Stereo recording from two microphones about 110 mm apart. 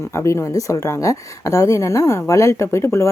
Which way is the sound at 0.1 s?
25° left (ahead or behind).